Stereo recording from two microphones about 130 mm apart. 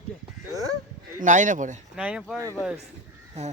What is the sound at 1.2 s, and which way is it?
Speech, 75° right (ahead or behind).